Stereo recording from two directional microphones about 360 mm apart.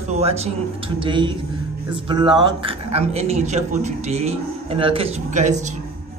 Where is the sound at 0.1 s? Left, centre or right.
Centre.